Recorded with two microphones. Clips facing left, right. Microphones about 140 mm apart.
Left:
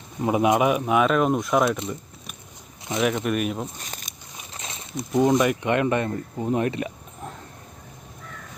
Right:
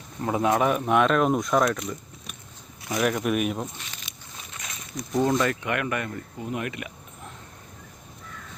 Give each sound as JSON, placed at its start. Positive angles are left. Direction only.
{"t": 0.2, "sound": "speech", "side_deg": 15}
{"t": 1.7, "sound": "speech", "side_deg": 25}
{"t": 3.0, "sound": "speech", "side_deg": 0}
{"t": 3.8, "sound": "a sound", "side_deg": 45}
{"t": 4.5, "sound": "a sound", "side_deg": 30}
{"t": 5.2, "sound": "speech", "side_deg": 15}